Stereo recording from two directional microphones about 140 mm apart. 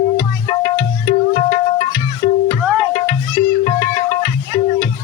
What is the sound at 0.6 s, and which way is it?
Music, 30° left (ahead or behind).